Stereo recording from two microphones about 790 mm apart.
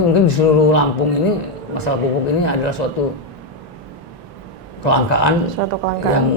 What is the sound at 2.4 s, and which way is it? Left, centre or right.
Speech, left.